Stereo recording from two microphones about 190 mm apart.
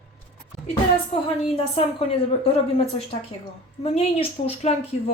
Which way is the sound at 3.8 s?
35° left (ahead or behind).